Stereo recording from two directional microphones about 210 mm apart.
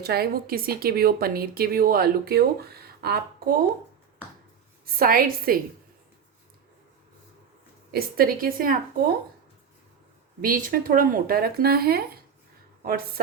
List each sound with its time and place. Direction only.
0.0 s a woman's voice: 50° right (ahead or behind)
4.9 s a woman's voice: 45° right (ahead or behind)
7.9 s a woman's voice: 45° right (ahead or behind)
10.4 s a woman's voice: 40° right (ahead or behind)